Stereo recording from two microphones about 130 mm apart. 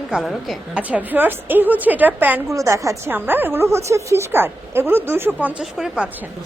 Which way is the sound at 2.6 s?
25° right (ahead or behind).